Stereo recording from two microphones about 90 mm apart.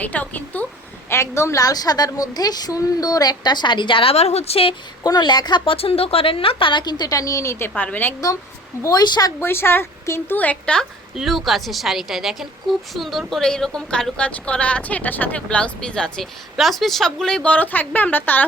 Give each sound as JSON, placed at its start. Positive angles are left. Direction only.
{"t": 0.0, "sound": "a woman's voice", "side_deg": 15}
{"t": 1.1, "sound": "a woman's voice", "side_deg": 30}
{"t": 4.5, "sound": "speech", "side_deg": 90}
{"t": 5.0, "sound": "a woman's voice", "side_deg": 50}
{"t": 7.8, "sound": "a woman's voice", "side_deg": 20}
{"t": 8.8, "sound": "a woman's voice", "side_deg": 45}
{"t": 9.4, "sound": "a woman's voice", "side_deg": 25}
{"t": 11.1, "sound": "a woman's voice", "side_deg": 0}